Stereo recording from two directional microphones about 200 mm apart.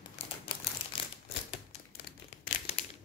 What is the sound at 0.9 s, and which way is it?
Typewriter, 25° left (ahead or behind).